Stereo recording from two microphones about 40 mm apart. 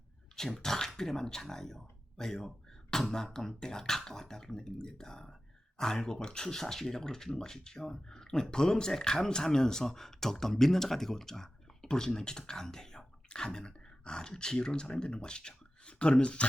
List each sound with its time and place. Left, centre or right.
0.3 s speech: centre
2.9 s beatboxing: centre
3.3 s speech: centre